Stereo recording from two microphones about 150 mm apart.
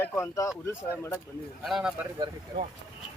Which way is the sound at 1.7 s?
5° right (ahead or behind).